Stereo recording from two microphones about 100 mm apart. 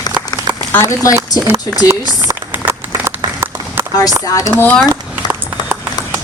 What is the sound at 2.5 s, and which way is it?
Run, 20° right (ahead or behind).